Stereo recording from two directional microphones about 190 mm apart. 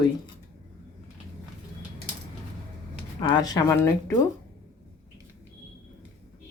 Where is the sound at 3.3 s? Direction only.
20° left (ahead or behind).